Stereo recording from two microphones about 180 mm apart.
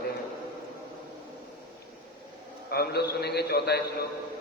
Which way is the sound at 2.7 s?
60° left (ahead or behind).